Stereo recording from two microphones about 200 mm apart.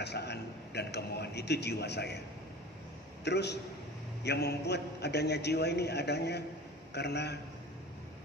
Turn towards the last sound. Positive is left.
turn(degrees=55)  # may be behind; listen again after turning